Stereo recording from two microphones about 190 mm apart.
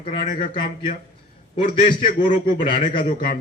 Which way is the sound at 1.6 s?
45° left (ahead or behind).